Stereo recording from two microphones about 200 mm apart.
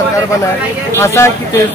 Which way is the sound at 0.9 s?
15° left (ahead or behind).